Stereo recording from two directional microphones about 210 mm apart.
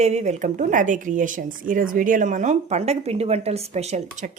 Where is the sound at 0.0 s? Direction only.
35° right (ahead or behind).